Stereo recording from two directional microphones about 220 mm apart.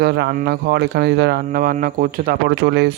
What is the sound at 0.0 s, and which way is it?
Speech, 45° right (ahead or behind).